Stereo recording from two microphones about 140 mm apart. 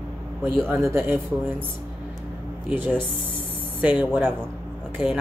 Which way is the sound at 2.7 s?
10° right (ahead or behind).